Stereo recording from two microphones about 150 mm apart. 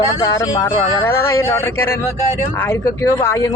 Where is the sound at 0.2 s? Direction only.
20° left (ahead or behind).